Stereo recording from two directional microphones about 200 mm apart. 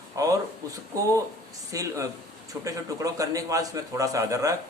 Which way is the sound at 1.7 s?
15° right (ahead or behind).